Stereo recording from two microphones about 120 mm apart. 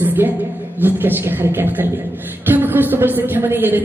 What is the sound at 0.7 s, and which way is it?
A woman's voice, 15° right (ahead or behind).